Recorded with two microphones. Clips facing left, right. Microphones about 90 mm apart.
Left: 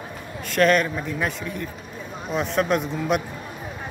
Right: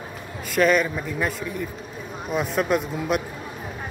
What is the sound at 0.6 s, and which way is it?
Speech, 5° right (ahead or behind).